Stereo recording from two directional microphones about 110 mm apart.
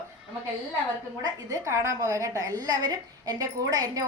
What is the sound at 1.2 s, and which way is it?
A woman's voice, 30° right (ahead or behind).